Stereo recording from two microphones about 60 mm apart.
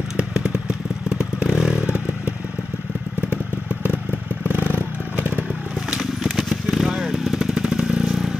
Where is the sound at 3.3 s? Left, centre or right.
Right.